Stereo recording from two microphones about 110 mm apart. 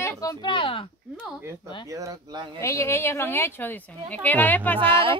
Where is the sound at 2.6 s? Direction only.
25° left (ahead or behind).